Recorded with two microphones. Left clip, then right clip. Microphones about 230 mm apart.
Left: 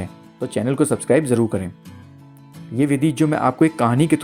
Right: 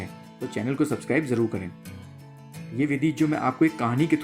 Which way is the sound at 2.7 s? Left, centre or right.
Left.